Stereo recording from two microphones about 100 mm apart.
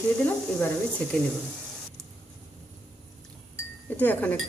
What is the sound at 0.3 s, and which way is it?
Speech, 15° left (ahead or behind).